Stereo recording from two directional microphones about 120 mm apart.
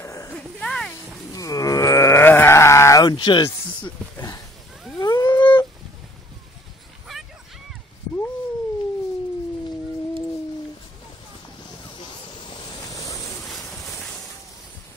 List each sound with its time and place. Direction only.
0.0 s a sound: 25° left (ahead or behind)
0.3 s a sound: 5° left (ahead or behind)
1.3 s grunt: 30° left (ahead or behind)
5.0 s whale vocalization: 35° left (ahead or behind)
12.0 s waves: 40° left (ahead or behind)
13.5 s boat: centre (ahead or behind)